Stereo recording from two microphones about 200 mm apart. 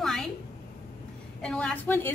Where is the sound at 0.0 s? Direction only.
Centre (ahead or behind).